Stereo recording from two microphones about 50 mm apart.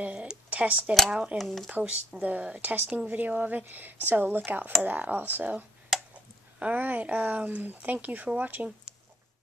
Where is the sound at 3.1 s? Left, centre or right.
Right.